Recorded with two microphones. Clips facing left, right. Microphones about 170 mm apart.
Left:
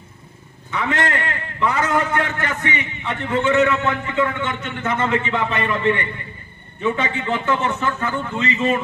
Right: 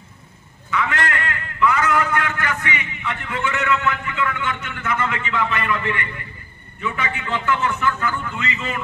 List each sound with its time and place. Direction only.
0.7 s a man's voice: 30° left (ahead or behind)